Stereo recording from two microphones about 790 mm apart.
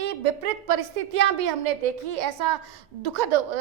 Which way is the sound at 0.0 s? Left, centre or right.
Right.